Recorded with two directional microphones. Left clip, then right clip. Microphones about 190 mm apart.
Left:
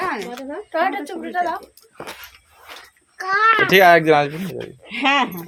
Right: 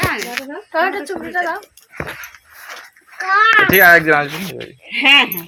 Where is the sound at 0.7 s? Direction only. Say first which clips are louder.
Right 3 dB; 75° left (ahead or behind).